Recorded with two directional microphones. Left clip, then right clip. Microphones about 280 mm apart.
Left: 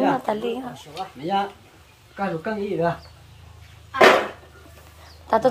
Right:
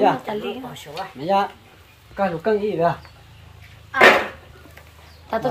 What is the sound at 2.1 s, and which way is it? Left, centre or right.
Speech, right.